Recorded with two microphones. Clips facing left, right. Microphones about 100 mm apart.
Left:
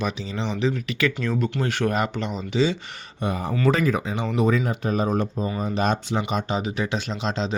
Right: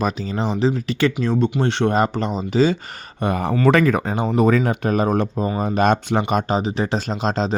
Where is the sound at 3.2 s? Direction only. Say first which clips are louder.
Right 5 dB; 65° right (ahead or behind).